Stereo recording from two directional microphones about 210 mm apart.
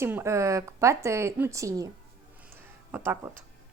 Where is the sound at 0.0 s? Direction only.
10° right (ahead or behind).